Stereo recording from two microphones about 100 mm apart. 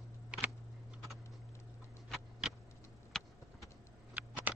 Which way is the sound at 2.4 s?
10° right (ahead or behind).